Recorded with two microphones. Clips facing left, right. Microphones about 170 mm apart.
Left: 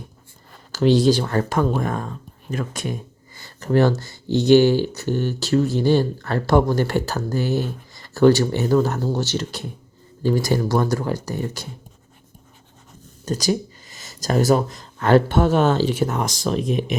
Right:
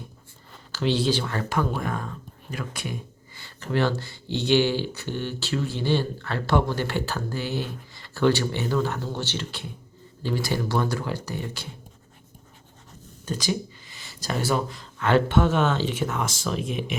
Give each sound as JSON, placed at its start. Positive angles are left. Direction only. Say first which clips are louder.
{"t": 0.7, "sound": "speech", "louder": "left 8 dB", "side_deg": 45}
{"t": 13.2, "sound": "speech", "louder": "left 6 dB", "side_deg": 40}